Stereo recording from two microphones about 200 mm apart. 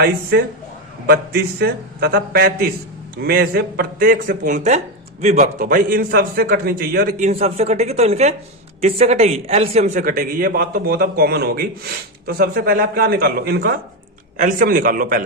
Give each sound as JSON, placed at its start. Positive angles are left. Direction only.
{"t": 0.0, "sound": "a man's voice", "side_deg": -55}